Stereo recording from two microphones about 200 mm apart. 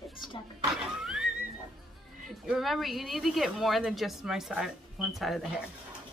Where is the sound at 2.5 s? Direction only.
Centre (ahead or behind).